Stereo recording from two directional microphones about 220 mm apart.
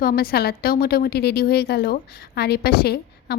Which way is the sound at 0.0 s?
45° left (ahead or behind).